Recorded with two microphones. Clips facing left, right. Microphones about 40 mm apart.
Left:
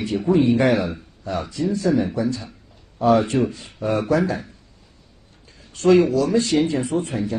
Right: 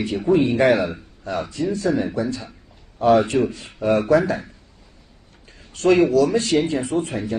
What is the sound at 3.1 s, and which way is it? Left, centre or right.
Speech, right.